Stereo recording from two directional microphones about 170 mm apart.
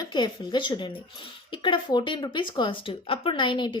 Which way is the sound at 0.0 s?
25° left (ahead or behind).